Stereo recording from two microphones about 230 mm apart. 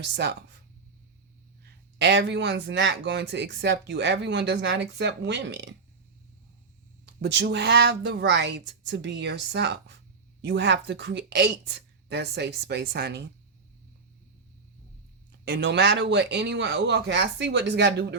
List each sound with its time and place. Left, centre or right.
0.0 s a man's voice: right
1.6 s a man's voice: right
7.0 s a man's voice: right
15.4 s a man's voice: right